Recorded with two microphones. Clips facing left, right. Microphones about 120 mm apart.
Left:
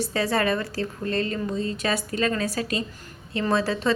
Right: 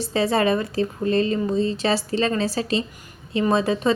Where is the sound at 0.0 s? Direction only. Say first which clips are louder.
Right 4 dB; 25° right (ahead or behind).